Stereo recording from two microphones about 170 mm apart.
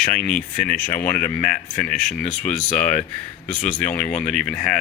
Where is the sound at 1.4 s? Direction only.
10° left (ahead or behind).